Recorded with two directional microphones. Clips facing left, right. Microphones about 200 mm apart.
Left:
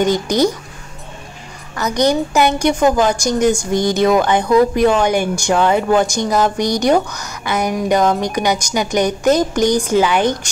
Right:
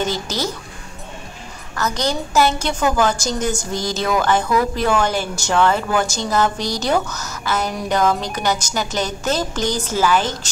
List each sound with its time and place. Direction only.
1.8 s a woman's voice: 15° left (ahead or behind)
3.7 s speech: 60° left (ahead or behind)
4.2 s a woman's voice: 20° left (ahead or behind)